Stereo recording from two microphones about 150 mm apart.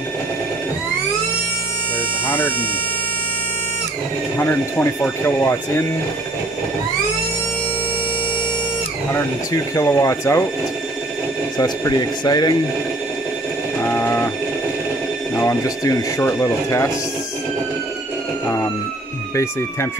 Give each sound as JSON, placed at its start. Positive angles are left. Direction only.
{"t": 2.2, "sound": "a sound", "side_deg": 10}
{"t": 4.4, "sound": "speech", "side_deg": 15}
{"t": 9.1, "sound": "speech", "side_deg": 20}
{"t": 11.5, "sound": "speech", "side_deg": 25}
{"t": 13.7, "sound": "mechanisms", "side_deg": 15}
{"t": 15.3, "sound": "speech", "side_deg": 20}